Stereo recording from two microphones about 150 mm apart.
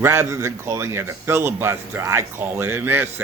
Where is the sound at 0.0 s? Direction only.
15° right (ahead or behind).